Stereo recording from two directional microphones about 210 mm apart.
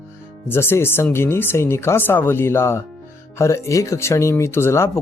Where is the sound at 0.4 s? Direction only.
10° left (ahead or behind).